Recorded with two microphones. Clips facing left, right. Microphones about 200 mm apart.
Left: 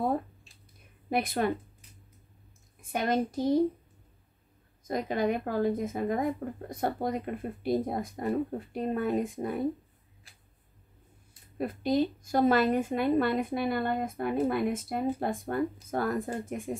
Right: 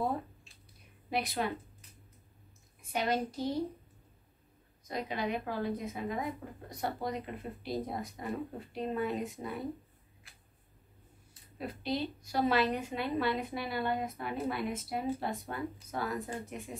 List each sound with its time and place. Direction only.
1.1 s a woman's voice: 50° left (ahead or behind)
2.8 s a child's voice: 50° left (ahead or behind)
4.8 s a woman's voice: 50° left (ahead or behind)
11.5 s a woman's voice: 50° left (ahead or behind)